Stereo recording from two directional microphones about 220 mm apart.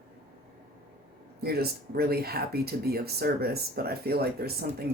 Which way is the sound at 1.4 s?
45° right (ahead or behind).